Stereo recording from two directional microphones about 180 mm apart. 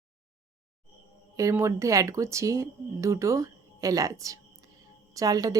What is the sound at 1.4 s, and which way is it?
A woman's voice, 15° right (ahead or behind).